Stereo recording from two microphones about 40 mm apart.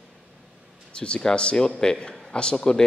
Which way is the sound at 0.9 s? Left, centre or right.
Left.